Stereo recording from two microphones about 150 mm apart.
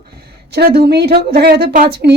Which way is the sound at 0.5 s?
90° right.